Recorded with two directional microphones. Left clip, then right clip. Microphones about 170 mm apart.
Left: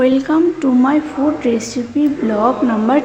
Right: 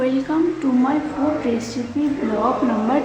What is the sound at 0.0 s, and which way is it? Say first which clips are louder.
Speech: left 6 dB; 35° left (ahead or behind).